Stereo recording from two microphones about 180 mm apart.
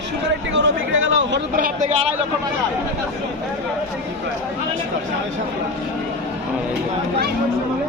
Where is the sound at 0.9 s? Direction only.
90° right.